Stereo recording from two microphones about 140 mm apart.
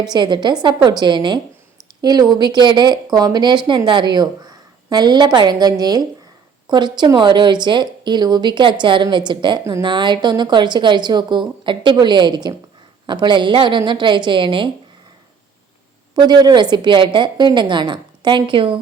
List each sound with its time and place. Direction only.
0.0 s speech: 30° right (ahead or behind)
16.1 s speech: 30° right (ahead or behind)